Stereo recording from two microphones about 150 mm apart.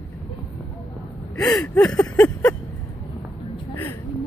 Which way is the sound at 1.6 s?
10° left (ahead or behind).